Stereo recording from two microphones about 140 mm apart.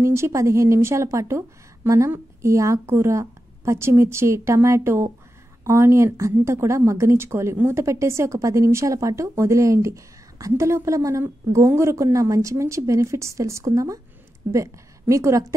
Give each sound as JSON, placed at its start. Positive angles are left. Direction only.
{"t": 0.0, "sound": "a woman's voice", "side_deg": -20}